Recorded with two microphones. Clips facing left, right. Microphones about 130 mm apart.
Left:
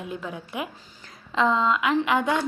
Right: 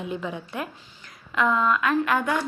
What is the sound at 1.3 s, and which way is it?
A woman's voice, 25° left (ahead or behind).